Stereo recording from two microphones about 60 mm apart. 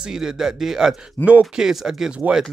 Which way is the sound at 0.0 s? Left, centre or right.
Centre.